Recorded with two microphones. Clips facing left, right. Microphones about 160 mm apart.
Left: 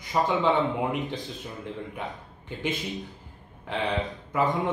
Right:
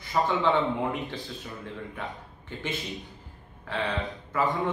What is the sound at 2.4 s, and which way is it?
A man's voice, 20° left (ahead or behind).